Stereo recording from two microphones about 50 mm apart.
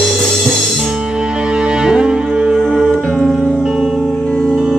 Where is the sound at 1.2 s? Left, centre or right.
Centre.